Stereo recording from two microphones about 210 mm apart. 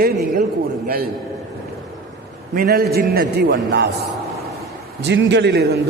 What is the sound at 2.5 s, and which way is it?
A man's voice, 45° right (ahead or behind).